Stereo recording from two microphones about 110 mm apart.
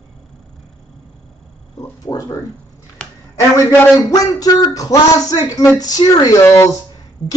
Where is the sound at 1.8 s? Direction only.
30° left (ahead or behind).